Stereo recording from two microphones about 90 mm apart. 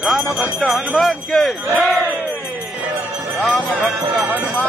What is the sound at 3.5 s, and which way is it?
Music, centre (ahead or behind).